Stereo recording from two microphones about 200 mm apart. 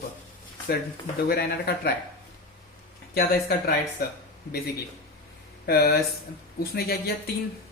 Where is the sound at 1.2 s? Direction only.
50° left (ahead or behind).